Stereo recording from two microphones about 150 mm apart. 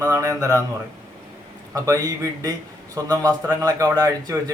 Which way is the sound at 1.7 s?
20° right (ahead or behind).